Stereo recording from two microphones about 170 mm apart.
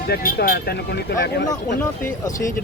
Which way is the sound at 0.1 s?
65° left (ahead or behind).